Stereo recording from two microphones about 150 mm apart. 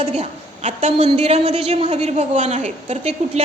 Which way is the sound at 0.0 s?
45° right (ahead or behind).